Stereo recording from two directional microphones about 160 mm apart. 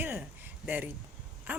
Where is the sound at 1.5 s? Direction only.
10° right (ahead or behind).